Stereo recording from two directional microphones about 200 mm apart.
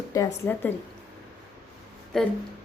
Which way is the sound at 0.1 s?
15° left (ahead or behind).